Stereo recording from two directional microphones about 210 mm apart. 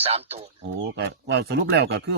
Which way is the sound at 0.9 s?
55° right (ahead or behind).